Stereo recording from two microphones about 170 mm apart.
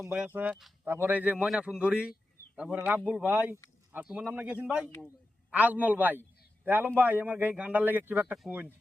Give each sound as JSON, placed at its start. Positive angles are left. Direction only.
{"t": 0.0, "sound": "a man's voice", "side_deg": -10}